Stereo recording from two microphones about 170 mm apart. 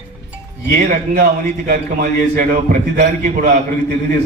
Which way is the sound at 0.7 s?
55° right (ahead or behind).